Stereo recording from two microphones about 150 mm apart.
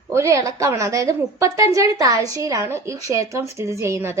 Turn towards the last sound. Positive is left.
turn(degrees=-15)  # may be behind; listen again after turning